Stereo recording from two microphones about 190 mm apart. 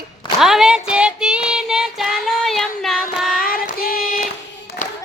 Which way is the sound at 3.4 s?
50° left (ahead or behind).